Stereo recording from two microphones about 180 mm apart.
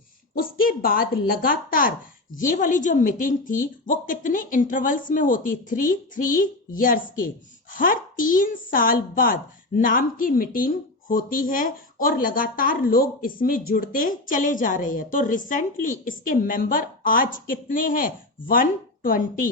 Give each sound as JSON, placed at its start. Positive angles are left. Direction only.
{"t": 0.3, "sound": "speech", "side_deg": 55}